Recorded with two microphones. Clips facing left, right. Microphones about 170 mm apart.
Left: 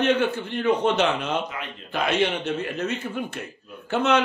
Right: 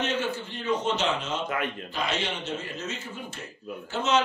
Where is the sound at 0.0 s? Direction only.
60° left (ahead or behind).